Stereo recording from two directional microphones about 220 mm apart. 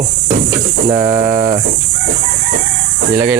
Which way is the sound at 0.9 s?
15° right (ahead or behind).